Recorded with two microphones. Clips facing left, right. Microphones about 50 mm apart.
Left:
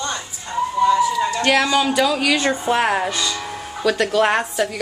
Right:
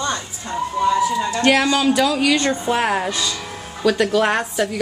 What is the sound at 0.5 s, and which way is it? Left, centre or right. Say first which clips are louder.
Emergency vehicle: left 2 dB; centre.